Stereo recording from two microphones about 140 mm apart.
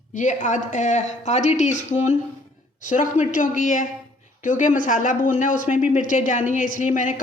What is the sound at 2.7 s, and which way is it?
A woman's voice, 65° left (ahead or behind).